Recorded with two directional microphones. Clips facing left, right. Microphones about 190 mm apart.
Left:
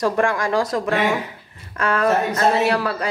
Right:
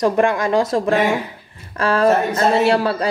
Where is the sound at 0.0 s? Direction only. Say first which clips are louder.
Right 3 dB; 20° right (ahead or behind).